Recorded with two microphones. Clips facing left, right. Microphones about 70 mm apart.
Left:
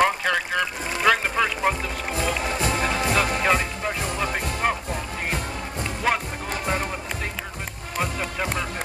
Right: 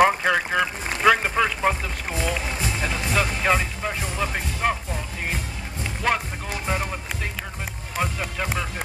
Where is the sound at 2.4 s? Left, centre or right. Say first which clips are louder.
Left 4 dB; left.